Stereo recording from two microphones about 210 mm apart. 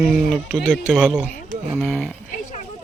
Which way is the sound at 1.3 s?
Centre (ahead or behind).